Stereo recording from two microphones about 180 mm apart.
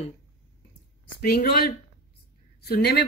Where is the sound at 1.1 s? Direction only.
60° left (ahead or behind).